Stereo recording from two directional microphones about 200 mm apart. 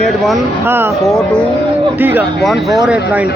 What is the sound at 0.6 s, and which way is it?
Speech, 10° right (ahead or behind).